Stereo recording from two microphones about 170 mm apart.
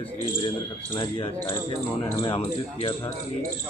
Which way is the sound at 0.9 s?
30° left (ahead or behind).